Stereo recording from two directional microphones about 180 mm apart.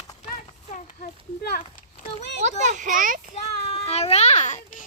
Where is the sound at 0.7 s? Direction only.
40° left (ahead or behind).